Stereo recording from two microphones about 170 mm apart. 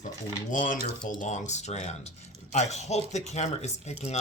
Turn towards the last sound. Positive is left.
turn(degrees=40)  # may be behind; listen again after turning